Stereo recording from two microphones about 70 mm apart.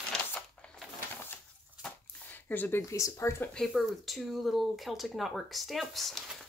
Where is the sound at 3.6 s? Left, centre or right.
Centre.